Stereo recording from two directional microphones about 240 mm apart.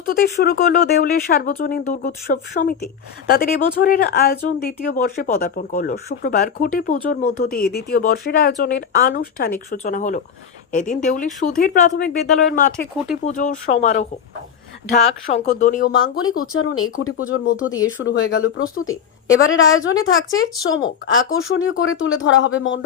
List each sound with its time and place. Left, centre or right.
0.2 s speech: left
12.7 s speech: centre
13.2 s speech: left
16.0 s speech: left